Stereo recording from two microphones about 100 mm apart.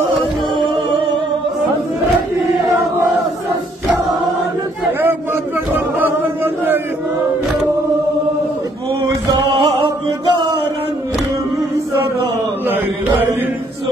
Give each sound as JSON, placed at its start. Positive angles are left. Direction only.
{"t": 5.0, "sound": "chant", "side_deg": -20}
{"t": 9.6, "sound": "music", "side_deg": -50}
{"t": 12.6, "sound": "mantra", "side_deg": -20}